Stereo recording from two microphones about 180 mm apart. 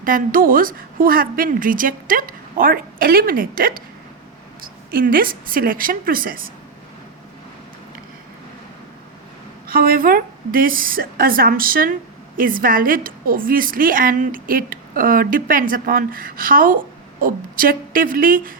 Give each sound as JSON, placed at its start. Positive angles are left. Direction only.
{"t": 0.0, "sound": "a woman's voice", "side_deg": -50}
{"t": 9.7, "sound": "a woman's voice", "side_deg": -55}